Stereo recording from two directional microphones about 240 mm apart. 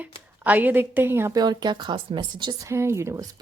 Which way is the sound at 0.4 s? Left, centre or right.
Centre.